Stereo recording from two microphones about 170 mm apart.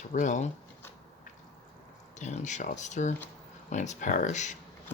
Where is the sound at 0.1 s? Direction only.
45° left (ahead or behind).